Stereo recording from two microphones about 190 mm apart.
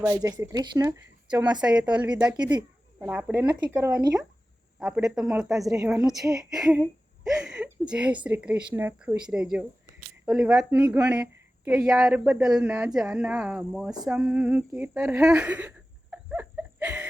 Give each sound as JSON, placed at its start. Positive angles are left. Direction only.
{"t": 0.0, "sound": "speech", "side_deg": -15}
{"t": 1.6, "sound": "speech", "side_deg": -5}
{"t": 2.3, "sound": "speech", "side_deg": -20}
{"t": 3.1, "sound": "speech", "side_deg": -5}
{"t": 3.8, "sound": "speech", "side_deg": -20}
{"t": 5.0, "sound": "speech", "side_deg": 0}
{"t": 14.8, "sound": "a sound", "side_deg": -5}